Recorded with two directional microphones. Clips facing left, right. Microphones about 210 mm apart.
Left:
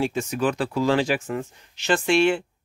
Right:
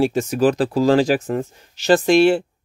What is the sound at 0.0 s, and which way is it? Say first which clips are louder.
Speech: right 7 dB; 40° right (ahead or behind).